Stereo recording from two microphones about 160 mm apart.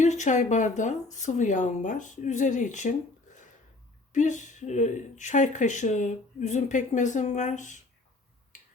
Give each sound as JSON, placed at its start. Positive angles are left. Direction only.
{"t": 0.0, "sound": "speech", "side_deg": 50}
{"t": 4.1, "sound": "speech", "side_deg": 50}